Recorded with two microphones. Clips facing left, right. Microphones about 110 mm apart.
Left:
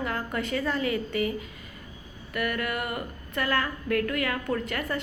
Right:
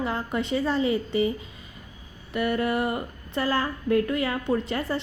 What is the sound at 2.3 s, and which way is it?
A woman's voice, 25° right (ahead or behind).